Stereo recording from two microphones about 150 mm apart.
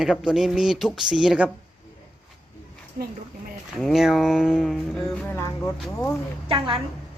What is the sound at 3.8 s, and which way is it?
Speech, centre (ahead or behind).